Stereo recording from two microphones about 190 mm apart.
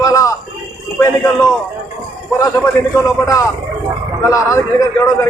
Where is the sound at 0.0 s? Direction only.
20° left (ahead or behind).